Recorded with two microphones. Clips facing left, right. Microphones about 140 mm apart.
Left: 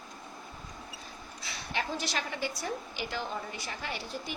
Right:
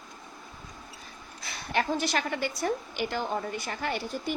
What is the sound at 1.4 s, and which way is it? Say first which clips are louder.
A woman's voice: right 6 dB; 55° right (ahead or behind).